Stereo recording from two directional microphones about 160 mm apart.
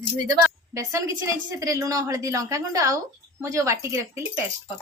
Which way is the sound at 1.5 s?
20° right (ahead or behind).